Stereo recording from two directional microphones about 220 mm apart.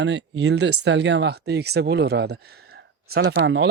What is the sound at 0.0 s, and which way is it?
Speech, 55° right (ahead or behind).